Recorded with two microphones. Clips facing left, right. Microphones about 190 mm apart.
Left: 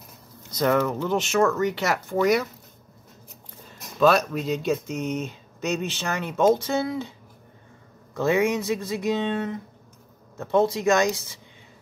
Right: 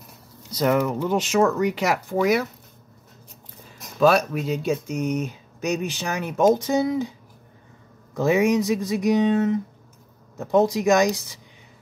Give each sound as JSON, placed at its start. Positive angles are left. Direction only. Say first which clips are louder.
{"t": 0.5, "sound": "speech", "louder": "right 1 dB", "side_deg": -10}
{"t": 4.3, "sound": "speech", "louder": "right 1 dB", "side_deg": -5}
{"t": 8.1, "sound": "speech", "louder": "right 3 dB", "side_deg": -15}
{"t": 10.5, "sound": "speech", "louder": "right 2 dB", "side_deg": -15}